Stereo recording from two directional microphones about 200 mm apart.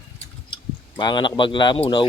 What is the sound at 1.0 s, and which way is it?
Speech, 20° left (ahead or behind).